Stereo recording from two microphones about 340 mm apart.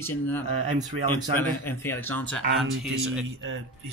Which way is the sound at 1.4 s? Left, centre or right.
Centre.